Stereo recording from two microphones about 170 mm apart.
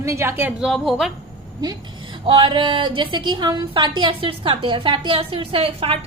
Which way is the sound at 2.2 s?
30° right (ahead or behind).